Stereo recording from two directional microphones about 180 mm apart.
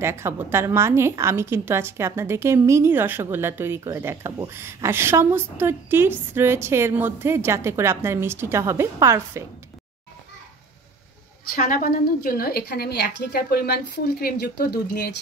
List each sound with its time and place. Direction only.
0.0 s a woman's voice: 15° right (ahead or behind)
11.5 s a woman's voice: 50° left (ahead or behind)